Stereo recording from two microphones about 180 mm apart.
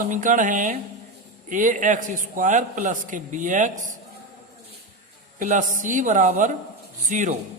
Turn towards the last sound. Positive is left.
turn(degrees=-45)  # may be behind; listen again after turning